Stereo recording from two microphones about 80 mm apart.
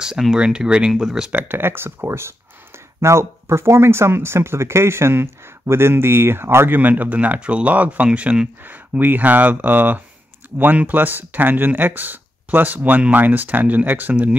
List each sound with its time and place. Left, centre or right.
0.0 s speech: centre
1.3 s speech: right